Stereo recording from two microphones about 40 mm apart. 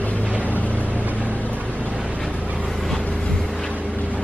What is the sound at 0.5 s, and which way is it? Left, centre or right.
Vehicle, left.